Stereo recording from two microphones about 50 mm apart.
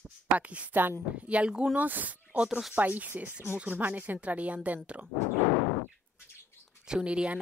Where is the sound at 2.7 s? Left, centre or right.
Right.